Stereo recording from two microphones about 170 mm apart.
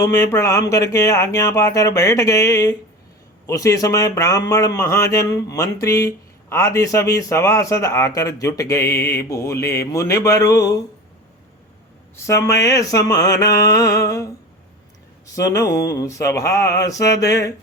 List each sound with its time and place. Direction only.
0.0 s a man's voice: 20° left (ahead or behind)
12.1 s a man's voice: 15° left (ahead or behind)
15.4 s a man's voice: 20° left (ahead or behind)